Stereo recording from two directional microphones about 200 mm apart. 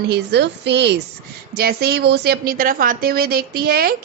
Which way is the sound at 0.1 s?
55° right (ahead or behind).